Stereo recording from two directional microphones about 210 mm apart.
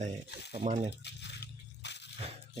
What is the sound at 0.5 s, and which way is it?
Speech, 35° right (ahead or behind).